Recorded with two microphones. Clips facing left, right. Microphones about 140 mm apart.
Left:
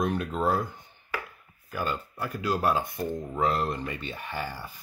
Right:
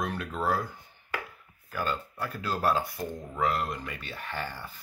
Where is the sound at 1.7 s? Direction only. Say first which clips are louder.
Left 1 dB; 15° left (ahead or behind).